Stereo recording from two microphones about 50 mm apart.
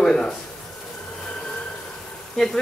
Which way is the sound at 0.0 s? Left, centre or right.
Centre.